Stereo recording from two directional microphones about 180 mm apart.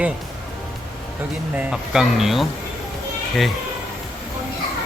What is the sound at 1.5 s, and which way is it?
Speech, 5° right (ahead or behind).